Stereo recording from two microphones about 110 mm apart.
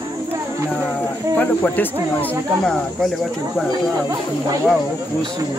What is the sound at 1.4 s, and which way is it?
Speech, 15° left (ahead or behind).